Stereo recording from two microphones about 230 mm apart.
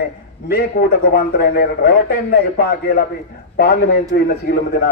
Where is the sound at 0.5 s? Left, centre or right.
Left.